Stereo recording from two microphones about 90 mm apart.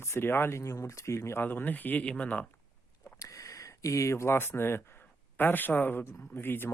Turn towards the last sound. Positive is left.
turn(degrees=25)  # may be behind; listen again after turning